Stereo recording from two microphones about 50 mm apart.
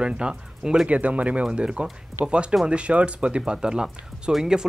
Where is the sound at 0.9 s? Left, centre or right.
Right.